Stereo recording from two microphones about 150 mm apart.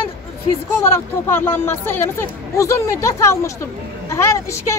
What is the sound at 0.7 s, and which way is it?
A woman's voice, 15° left (ahead or behind).